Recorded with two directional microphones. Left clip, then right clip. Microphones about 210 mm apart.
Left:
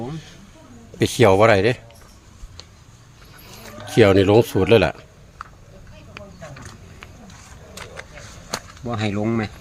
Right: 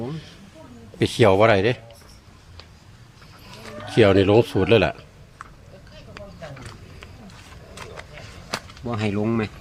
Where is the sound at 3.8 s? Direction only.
30° left (ahead or behind).